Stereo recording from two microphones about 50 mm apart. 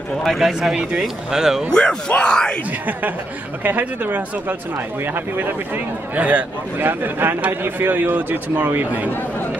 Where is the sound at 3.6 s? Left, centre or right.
Right.